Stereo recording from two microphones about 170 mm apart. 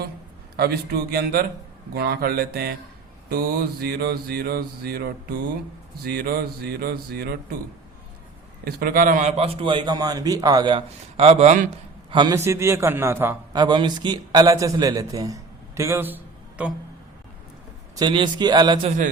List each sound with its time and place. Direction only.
0.5 s mantra: 65° right (ahead or behind)
8.6 s a man's voice: 60° right (ahead or behind)
12.1 s a man's voice: 25° right (ahead or behind)
13.5 s a man's voice: 25° right (ahead or behind); by 16.7 s 10° right (ahead or behind)
17.9 s a man's voice: 25° right (ahead or behind)
18.9 s a man's voice: 50° right (ahead or behind)